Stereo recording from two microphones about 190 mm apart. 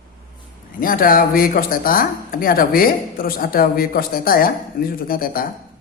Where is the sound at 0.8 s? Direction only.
50° left (ahead or behind).